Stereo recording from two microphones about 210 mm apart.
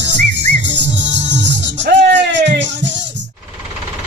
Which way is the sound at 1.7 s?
55° right (ahead or behind).